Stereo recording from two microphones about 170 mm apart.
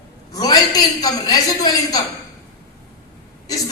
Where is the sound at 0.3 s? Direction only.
20° left (ahead or behind).